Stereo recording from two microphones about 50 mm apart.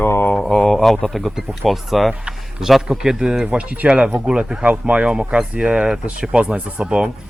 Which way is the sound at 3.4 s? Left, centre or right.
Right.